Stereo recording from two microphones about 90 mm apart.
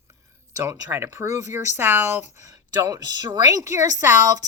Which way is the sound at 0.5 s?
40° right (ahead or behind).